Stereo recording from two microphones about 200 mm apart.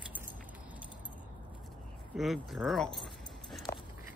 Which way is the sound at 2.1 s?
Centre (ahead or behind).